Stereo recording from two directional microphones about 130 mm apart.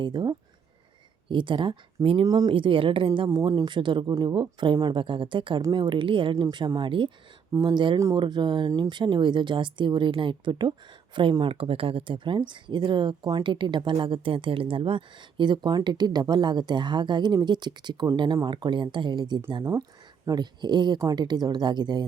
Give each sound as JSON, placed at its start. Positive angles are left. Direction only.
{"t": 0.0, "sound": "speech", "side_deg": -35}
{"t": 2.2, "sound": "speech", "side_deg": -30}
{"t": 2.5, "sound": "a woman's voice", "side_deg": -40}